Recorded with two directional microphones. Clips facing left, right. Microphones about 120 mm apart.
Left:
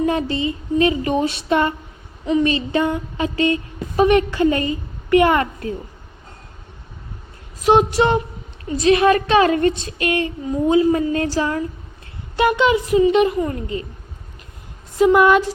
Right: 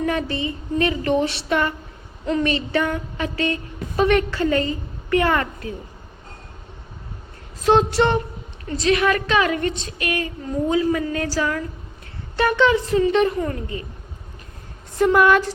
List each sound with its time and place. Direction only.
0.0 s a woman's voice: 20° left (ahead or behind)
7.6 s a woman's voice: 15° left (ahead or behind)
13.5 s a woman's voice: 25° left (ahead or behind)
14.9 s speech: 10° left (ahead or behind)